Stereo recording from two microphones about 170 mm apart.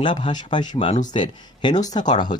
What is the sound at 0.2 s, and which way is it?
Speech, 25° left (ahead or behind).